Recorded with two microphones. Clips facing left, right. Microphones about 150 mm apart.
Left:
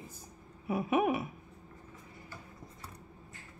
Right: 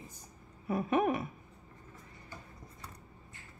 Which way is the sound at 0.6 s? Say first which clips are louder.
Even; 10° left (ahead or behind).